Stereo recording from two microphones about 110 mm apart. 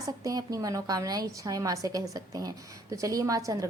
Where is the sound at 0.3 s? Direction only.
30° right (ahead or behind).